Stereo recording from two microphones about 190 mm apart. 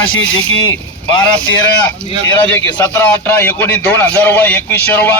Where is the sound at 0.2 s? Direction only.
90° left.